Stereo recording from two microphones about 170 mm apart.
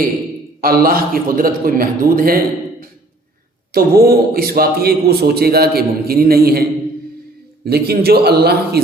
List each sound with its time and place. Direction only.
0.6 s a man's voice: 60° right (ahead or behind)
3.7 s a man's voice: 65° right (ahead or behind)